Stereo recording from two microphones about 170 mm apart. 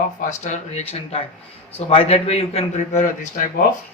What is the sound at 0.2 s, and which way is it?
A man's voice, 45° left (ahead or behind).